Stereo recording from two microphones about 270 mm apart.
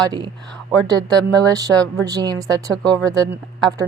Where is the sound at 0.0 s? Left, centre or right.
Centre.